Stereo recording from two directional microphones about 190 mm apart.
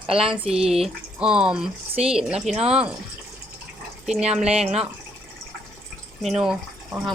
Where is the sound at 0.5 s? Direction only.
Centre (ahead or behind).